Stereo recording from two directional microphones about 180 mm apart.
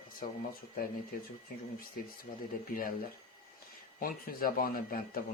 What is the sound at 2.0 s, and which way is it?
Speech, 55° left (ahead or behind).